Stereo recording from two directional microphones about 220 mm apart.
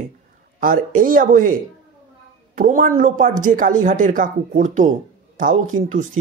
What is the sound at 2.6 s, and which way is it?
Speech, 35° right (ahead or behind).